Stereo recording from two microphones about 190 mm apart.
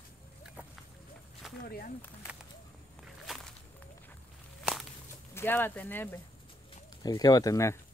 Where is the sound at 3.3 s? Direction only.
Centre (ahead or behind).